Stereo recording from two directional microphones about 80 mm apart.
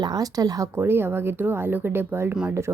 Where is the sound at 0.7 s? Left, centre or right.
Right.